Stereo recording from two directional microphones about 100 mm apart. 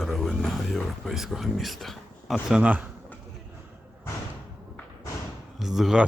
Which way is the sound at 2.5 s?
15° right (ahead or behind).